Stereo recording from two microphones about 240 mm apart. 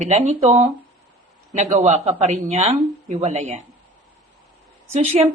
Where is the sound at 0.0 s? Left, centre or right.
Right.